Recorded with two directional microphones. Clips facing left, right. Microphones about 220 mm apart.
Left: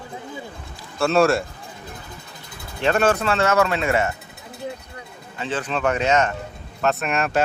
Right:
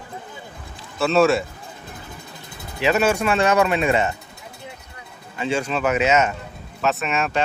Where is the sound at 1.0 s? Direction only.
Centre (ahead or behind).